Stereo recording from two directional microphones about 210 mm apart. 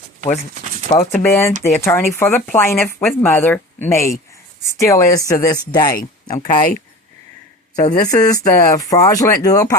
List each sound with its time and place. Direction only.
0.5 s a sound: 35° right (ahead or behind)
1.2 s speech: 10° left (ahead or behind)
7.8 s speech: 35° left (ahead or behind)
8.1 s speech: 15° left (ahead or behind)